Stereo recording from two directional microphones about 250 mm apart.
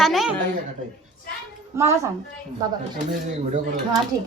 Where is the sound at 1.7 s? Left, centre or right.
Centre.